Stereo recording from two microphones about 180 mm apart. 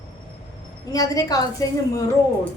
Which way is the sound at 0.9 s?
20° left (ahead or behind).